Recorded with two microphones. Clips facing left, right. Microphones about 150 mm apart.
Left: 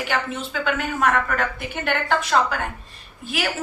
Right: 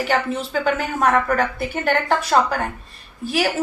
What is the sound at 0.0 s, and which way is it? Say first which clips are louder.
A woman's voice: right 5 dB; 35° right (ahead or behind).